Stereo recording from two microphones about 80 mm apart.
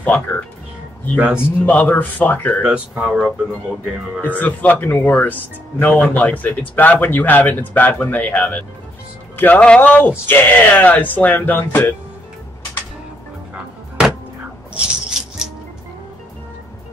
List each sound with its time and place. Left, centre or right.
0.0 s speech: left
1.1 s speech: centre
1.7 s speech: centre
3.0 s speech: centre
4.2 s speech: left
14.7 s rattle: centre